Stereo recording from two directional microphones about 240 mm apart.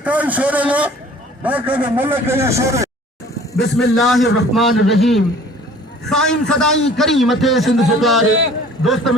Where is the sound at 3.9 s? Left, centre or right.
Centre.